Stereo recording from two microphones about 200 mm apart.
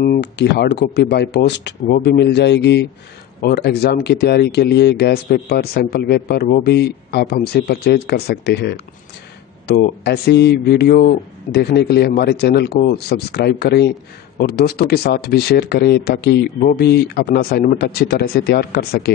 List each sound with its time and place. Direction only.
0.0 s a man's voice: 55° left (ahead or behind)